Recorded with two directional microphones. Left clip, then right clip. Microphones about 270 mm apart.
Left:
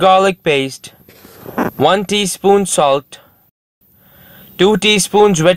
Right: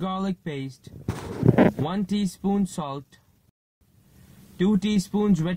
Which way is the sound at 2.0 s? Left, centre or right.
Left.